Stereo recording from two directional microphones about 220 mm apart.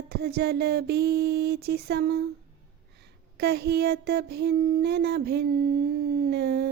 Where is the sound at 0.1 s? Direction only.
45° right (ahead or behind).